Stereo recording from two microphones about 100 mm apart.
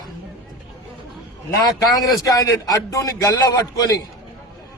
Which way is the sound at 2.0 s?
35° left (ahead or behind).